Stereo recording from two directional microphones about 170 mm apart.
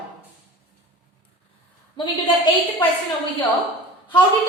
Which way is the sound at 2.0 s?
25° left (ahead or behind).